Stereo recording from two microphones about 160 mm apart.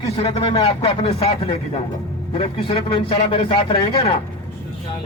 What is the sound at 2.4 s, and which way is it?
Speech, 35° left (ahead or behind).